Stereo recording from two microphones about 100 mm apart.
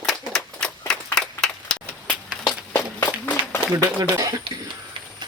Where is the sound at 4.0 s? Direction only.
35° right (ahead or behind).